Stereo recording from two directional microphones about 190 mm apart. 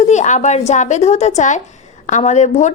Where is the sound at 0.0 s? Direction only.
40° left (ahead or behind).